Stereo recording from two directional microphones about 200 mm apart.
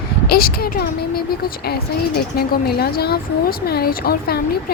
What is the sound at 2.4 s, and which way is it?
A woman's voice, 50° left (ahead or behind).